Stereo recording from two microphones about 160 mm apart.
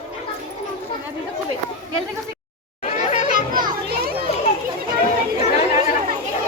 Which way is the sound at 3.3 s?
60° right (ahead or behind).